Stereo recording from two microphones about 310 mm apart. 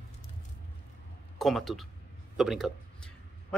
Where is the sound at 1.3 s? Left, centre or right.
Centre.